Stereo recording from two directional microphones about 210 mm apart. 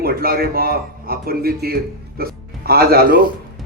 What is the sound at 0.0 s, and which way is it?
A man's voice, 45° right (ahead or behind).